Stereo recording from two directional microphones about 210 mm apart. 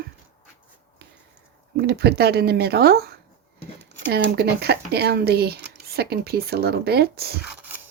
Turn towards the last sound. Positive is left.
turn(degrees=-10)  # may be behind; listen again after turning